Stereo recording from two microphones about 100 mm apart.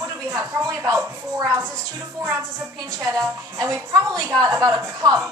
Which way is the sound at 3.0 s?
35° right (ahead or behind).